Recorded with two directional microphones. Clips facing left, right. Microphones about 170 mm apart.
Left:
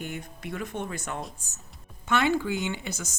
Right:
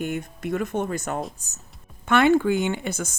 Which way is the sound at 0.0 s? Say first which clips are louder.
Right 8 dB; 50° right (ahead or behind).